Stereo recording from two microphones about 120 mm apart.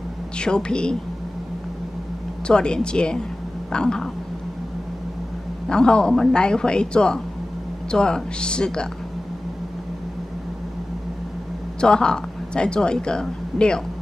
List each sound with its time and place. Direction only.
0.4 s a woman's voice: 5° left (ahead or behind)
2.4 s a woman's voice: 5° left (ahead or behind)
5.7 s a woman's voice: 5° left (ahead or behind)
11.8 s a woman's voice: 5° left (ahead or behind)